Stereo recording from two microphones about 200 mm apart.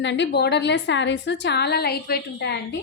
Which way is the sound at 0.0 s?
65° left (ahead or behind).